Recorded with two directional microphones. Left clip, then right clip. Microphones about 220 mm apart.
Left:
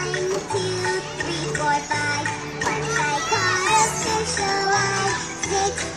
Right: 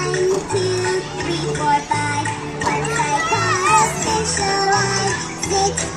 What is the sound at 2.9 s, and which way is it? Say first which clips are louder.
Children playing: right 2 dB; 35° right (ahead or behind).